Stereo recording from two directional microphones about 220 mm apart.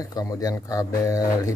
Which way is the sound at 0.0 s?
15° left (ahead or behind).